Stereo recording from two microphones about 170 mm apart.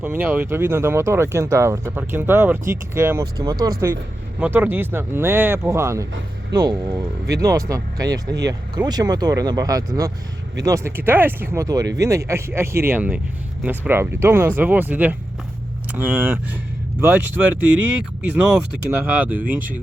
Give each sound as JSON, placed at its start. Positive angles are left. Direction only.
{"t": 0.0, "sound": "speech", "side_deg": -10}
{"t": 18.9, "sound": "speech", "side_deg": -10}